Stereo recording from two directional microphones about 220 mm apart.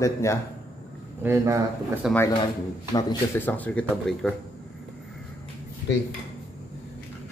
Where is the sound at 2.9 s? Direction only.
10° left (ahead or behind).